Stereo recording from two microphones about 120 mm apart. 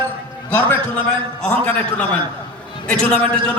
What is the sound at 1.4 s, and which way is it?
A man's voice, 15° left (ahead or behind).